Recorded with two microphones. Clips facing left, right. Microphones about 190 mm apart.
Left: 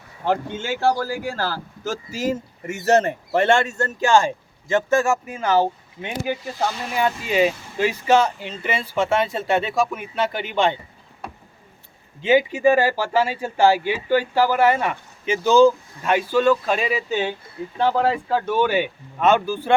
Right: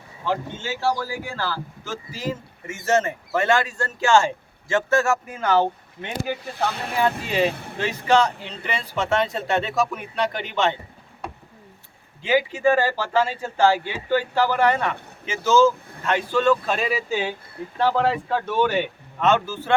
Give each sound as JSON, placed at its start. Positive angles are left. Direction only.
{"t": 0.3, "sound": "speech", "side_deg": 50}
{"t": 3.4, "sound": "speech", "side_deg": 25}
{"t": 6.4, "sound": "speech", "side_deg": -60}
{"t": 8.0, "sound": "speech", "side_deg": 10}
{"t": 12.2, "sound": "speech", "side_deg": 20}